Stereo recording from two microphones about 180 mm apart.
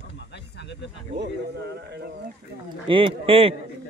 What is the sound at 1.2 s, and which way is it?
Speech, 70° right (ahead or behind).